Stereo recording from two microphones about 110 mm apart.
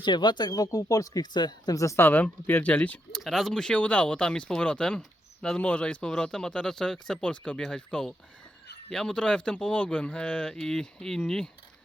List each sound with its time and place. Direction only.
0.0 s speech: 45° left (ahead or behind); by 3.0 s 15° left (ahead or behind)
3.1 s speech: centre (ahead or behind)